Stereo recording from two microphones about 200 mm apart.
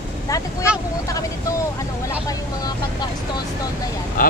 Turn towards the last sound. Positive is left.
turn(degrees=45)  # may be behind; listen again after turning